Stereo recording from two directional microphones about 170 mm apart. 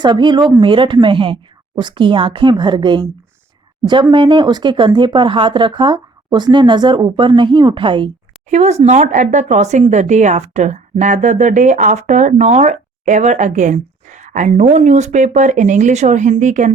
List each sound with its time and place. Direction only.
0.0 s speech: 25° right (ahead or behind)
4.1 s speech: 30° right (ahead or behind)
8.4 s speech: 40° right (ahead or behind)